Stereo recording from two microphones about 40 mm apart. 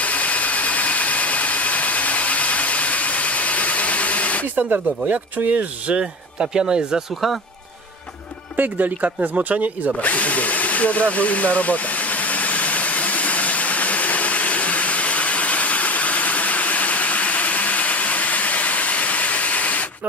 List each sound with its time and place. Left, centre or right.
0.0 s jet engine: left
4.6 s speech: right
5.1 s speech: right
6.4 s speech: right
8.5 s speech: right
10.0 s drill: left